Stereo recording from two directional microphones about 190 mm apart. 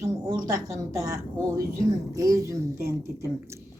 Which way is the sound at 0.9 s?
15° right (ahead or behind).